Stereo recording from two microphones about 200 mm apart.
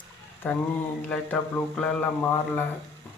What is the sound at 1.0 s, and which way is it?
Speech, 5° left (ahead or behind).